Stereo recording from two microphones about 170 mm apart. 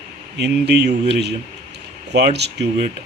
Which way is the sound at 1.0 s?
85° right.